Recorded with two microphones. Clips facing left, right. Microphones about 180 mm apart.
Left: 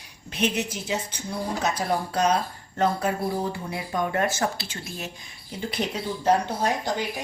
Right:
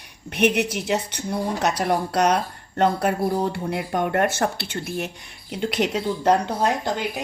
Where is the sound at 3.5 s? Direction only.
70° right (ahead or behind).